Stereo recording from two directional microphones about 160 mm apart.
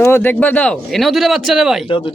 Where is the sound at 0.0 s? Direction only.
15° left (ahead or behind).